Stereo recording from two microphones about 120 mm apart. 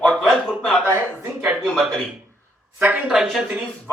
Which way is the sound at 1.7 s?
Centre (ahead or behind).